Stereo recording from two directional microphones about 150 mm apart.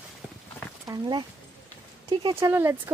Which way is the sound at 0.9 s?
30° right (ahead or behind).